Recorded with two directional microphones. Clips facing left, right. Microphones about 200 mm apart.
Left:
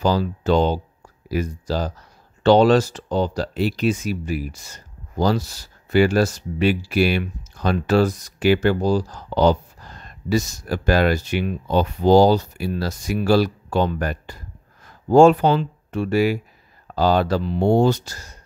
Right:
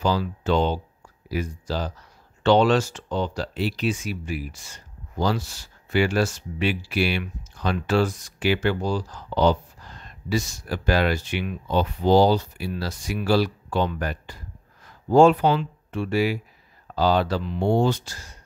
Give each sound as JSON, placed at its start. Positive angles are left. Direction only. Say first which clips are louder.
{"t": 0.0, "sound": "speech", "louder": "left 4 dB", "side_deg": 40}